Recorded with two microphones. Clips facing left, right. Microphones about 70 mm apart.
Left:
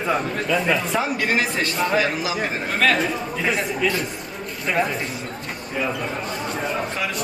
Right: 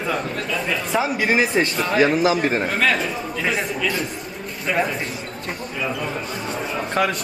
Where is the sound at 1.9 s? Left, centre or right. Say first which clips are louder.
Right 9 dB; right.